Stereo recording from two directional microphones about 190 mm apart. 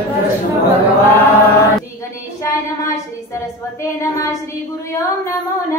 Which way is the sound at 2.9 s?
15° left (ahead or behind).